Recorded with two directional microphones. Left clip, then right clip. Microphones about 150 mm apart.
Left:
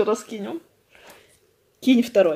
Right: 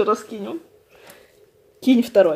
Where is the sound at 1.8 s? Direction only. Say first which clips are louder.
Right 2 dB; centre (ahead or behind).